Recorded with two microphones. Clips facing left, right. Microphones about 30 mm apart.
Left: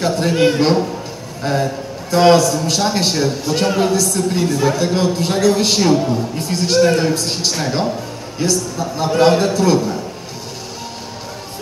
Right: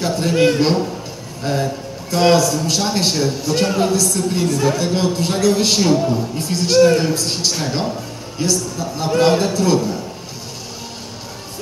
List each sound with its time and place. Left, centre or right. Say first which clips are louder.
0.0 s a man's voice: left 1 dB; centre